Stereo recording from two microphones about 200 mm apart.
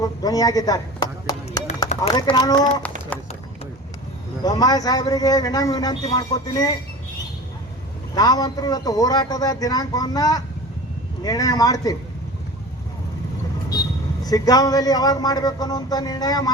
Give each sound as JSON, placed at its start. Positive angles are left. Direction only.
{"t": 0.0, "sound": "speech", "side_deg": 20}
{"t": 1.9, "sound": "a sound", "side_deg": 35}
{"t": 2.3, "sound": "a man's voice", "side_deg": 20}
{"t": 3.1, "sound": "a sound", "side_deg": 5}
{"t": 4.4, "sound": "a man's voice", "side_deg": 20}
{"t": 8.1, "sound": "a man's voice", "side_deg": 20}
{"t": 14.3, "sound": "a man's voice", "side_deg": 20}